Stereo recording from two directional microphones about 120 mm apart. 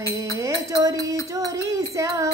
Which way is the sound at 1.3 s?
25° right (ahead or behind).